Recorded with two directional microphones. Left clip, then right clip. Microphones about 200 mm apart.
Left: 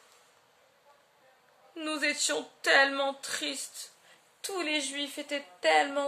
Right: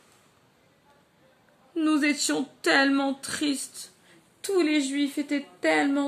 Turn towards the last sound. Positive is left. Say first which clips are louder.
# right 1 dB
turn(degrees=-15)  # may be behind; listen again after turning